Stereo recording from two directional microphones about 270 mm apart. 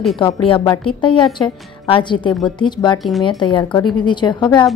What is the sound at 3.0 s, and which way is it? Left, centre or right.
Speech, centre.